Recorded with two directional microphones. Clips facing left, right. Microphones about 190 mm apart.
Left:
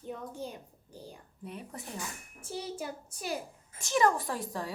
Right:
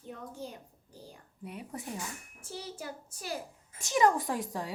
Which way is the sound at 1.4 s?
10° right (ahead or behind).